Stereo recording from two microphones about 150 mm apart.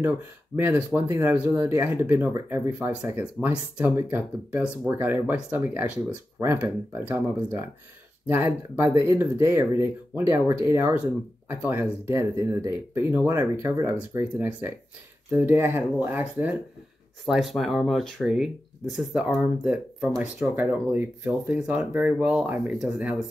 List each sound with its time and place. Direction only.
0.6 s speech: 15° right (ahead or behind)
17.3 s speech: centre (ahead or behind)